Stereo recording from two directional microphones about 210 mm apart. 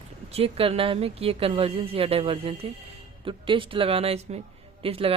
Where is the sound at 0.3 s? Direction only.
25° right (ahead or behind).